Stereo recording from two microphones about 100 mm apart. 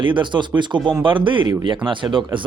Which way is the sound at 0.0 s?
55° right (ahead or behind).